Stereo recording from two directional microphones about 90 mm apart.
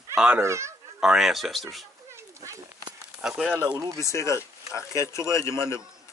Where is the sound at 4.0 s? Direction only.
35° left (ahead or behind).